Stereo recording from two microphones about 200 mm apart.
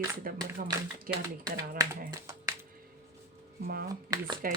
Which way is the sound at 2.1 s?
15° right (ahead or behind).